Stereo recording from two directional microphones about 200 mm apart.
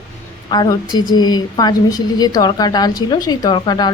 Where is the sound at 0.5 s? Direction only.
20° left (ahead or behind).